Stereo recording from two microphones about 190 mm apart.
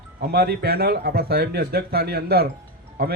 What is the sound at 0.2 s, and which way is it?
Speech, 55° right (ahead or behind).